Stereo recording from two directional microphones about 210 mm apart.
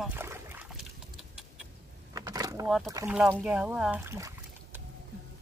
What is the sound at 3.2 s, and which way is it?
Speech, 5° right (ahead or behind).